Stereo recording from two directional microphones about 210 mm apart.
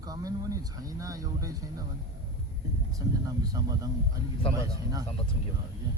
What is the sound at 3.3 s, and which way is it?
Speech, 15° right (ahead or behind).